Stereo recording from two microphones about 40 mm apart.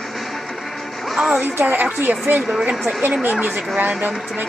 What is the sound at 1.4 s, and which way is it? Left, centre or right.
Speech, right.